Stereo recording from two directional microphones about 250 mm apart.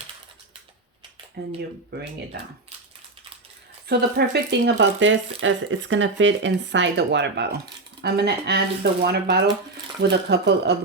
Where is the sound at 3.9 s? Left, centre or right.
Right.